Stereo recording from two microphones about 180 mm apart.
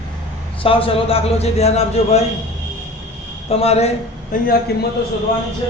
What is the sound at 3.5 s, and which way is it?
Speech, 35° left (ahead or behind).